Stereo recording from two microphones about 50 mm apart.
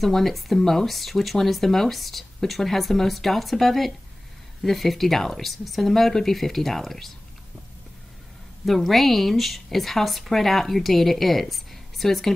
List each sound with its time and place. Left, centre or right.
0.0 s speech: centre
8.6 s speech: centre